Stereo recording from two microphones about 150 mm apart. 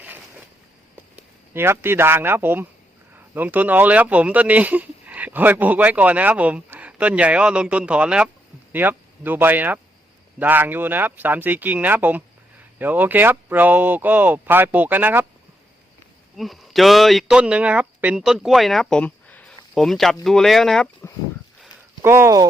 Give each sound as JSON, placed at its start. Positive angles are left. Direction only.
{"t": 1.5, "sound": "speech", "side_deg": -15}
{"t": 16.4, "sound": "speech", "side_deg": 0}
{"t": 21.0, "sound": "speech", "side_deg": 15}
{"t": 22.0, "sound": "speech", "side_deg": -15}